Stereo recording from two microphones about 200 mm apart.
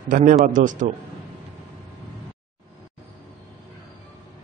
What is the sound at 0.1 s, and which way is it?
Speech, 40° right (ahead or behind).